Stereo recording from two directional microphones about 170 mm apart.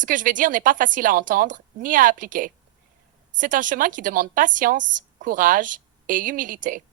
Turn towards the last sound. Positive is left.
turn(degrees=-50)  # may be behind; listen again after turning